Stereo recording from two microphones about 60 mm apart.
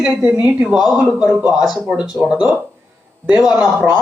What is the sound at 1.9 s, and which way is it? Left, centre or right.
A woman's voice, centre.